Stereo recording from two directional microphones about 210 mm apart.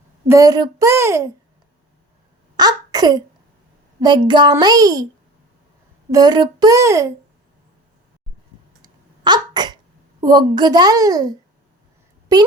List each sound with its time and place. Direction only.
0.3 s speech: 15° right (ahead or behind)
2.6 s a sound: 20° right (ahead or behind)
4.0 s speech: 20° right (ahead or behind)
6.1 s speech: 20° right (ahead or behind)
8.8 s a sound: 20° right (ahead or behind)
12.3 s speech: 15° right (ahead or behind)